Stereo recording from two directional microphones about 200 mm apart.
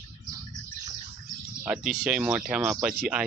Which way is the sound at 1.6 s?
5° right (ahead or behind).